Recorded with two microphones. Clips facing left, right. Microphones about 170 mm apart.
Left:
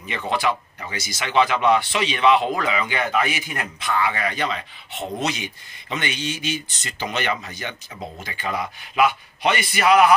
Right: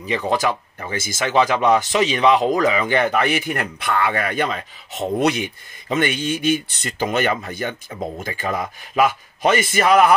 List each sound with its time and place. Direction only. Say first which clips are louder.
0.0 s speech: right 4 dB; 35° right (ahead or behind)